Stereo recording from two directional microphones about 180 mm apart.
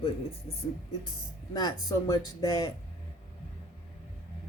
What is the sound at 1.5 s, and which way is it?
Speech, 20° left (ahead or behind).